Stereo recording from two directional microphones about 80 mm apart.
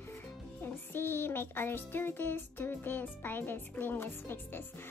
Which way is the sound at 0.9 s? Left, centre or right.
Left.